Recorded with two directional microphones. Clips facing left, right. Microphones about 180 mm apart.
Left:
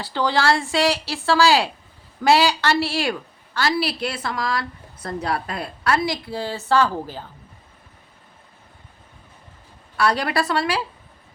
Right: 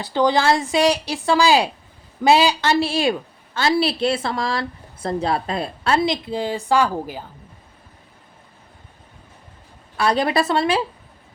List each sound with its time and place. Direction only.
0.0 s a woman's voice: 20° right (ahead or behind)
10.0 s a woman's voice: 20° right (ahead or behind)